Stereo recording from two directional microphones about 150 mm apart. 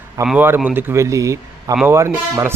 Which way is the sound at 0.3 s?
10° right (ahead or behind).